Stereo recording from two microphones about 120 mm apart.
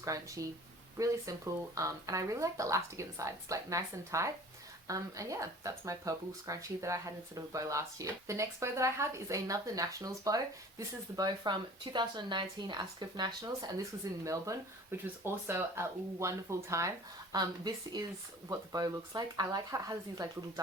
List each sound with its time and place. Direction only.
0.0 s speech: 25° right (ahead or behind)
14.0 s speech: 25° right (ahead or behind)